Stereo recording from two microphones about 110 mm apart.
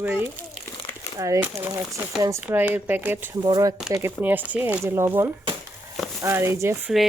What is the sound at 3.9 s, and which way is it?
Speech, 20° right (ahead or behind).